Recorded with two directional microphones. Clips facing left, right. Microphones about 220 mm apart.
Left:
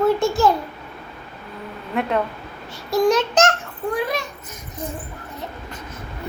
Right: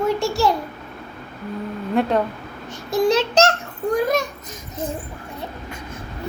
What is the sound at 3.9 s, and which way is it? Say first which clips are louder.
Speech: right 5 dB; 45° right (ahead or behind).